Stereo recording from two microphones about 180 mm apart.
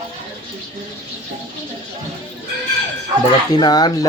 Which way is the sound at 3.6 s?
20° left (ahead or behind).